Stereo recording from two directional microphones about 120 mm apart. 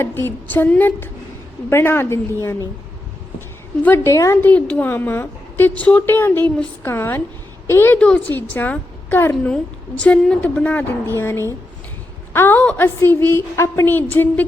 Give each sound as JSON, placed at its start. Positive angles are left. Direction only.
{"t": 0.0, "sound": "a woman's voice", "side_deg": 20}
{"t": 3.8, "sound": "a woman's voice", "side_deg": 20}
{"t": 7.9, "sound": "a woman's voice", "side_deg": 10}